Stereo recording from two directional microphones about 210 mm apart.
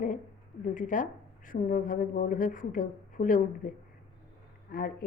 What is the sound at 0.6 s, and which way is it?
A woman's voice, 40° left (ahead or behind).